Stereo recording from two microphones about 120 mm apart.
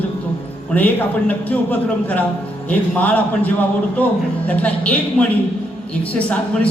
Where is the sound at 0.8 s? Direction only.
15° left (ahead or behind).